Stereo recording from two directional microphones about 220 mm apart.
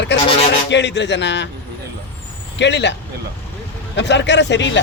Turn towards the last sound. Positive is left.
turn(degrees=55)  # may be behind; listen again after turning